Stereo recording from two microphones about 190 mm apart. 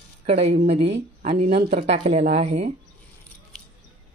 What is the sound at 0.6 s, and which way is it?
Speech, 50° right (ahead or behind).